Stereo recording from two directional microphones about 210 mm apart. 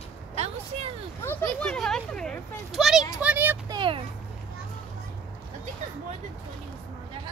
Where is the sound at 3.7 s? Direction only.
25° right (ahead or behind).